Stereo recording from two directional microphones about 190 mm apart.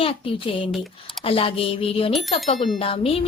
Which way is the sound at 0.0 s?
30° left (ahead or behind).